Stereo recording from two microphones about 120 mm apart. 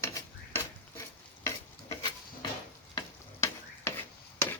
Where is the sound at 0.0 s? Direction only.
25° left (ahead or behind).